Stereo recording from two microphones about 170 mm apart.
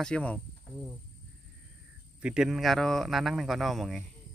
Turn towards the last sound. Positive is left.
turn(degrees=0)  # may be behind; listen again after turning